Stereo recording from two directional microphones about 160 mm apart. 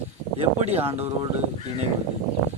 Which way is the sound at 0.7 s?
40° right (ahead or behind).